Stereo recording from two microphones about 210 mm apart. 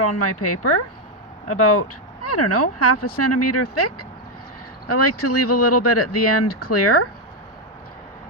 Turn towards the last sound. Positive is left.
turn(degrees=90)